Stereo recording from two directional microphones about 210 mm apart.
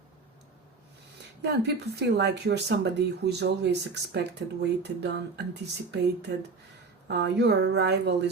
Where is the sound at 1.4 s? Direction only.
55° right (ahead or behind).